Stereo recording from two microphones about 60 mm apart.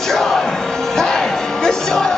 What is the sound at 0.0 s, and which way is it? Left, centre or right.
Music, centre.